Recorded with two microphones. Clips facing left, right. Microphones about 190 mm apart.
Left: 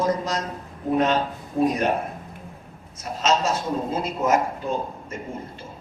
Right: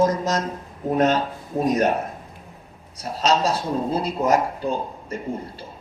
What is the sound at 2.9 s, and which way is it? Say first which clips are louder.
A man's voice: right 2 dB; 35° right (ahead or behind).